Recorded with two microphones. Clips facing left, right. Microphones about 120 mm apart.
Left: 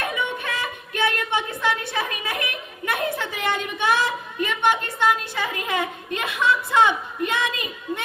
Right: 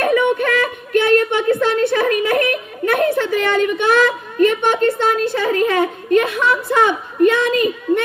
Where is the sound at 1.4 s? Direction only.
60° right (ahead or behind).